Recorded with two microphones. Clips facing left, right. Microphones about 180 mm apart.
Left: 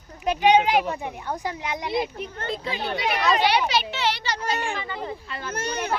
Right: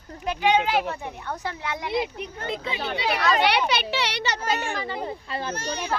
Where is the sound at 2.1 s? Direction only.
20° right (ahead or behind).